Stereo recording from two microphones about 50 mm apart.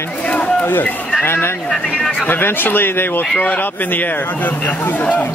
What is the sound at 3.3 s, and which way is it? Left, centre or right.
Speech, left.